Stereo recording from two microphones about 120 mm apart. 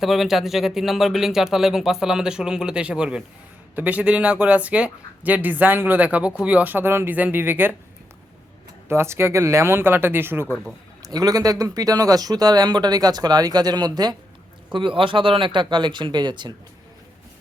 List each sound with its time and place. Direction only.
0.0 s speech: centre (ahead or behind)
8.9 s speech: 20° right (ahead or behind)
11.0 s speech: 30° right (ahead or behind)